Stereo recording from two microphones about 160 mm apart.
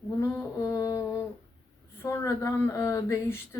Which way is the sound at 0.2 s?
20° left (ahead or behind).